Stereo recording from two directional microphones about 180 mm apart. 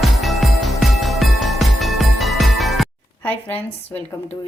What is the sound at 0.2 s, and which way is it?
Music, centre (ahead or behind).